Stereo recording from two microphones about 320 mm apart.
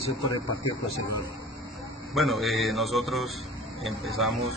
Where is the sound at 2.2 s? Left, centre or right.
Centre.